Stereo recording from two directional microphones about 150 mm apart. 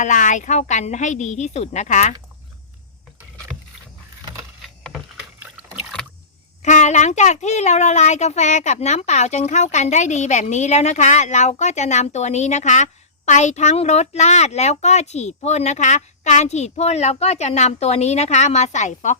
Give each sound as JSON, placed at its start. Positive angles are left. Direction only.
{"t": 0.0, "sound": "speech", "side_deg": 55}
{"t": 4.6, "sound": "a sound", "side_deg": 0}
{"t": 6.6, "sound": "speech", "side_deg": 50}